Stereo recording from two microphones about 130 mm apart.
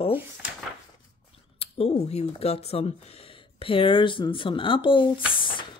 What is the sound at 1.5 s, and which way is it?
Speech, 50° left (ahead or behind).